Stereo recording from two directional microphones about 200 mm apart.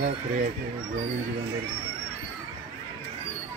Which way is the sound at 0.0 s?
40° right (ahead or behind).